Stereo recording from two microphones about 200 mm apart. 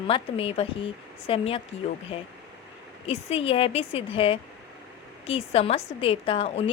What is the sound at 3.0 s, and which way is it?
Speech, 30° left (ahead or behind).